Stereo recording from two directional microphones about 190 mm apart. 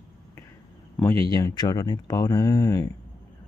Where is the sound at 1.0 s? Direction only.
15° left (ahead or behind).